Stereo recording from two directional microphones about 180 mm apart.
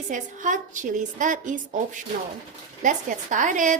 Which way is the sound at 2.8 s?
45° right (ahead or behind).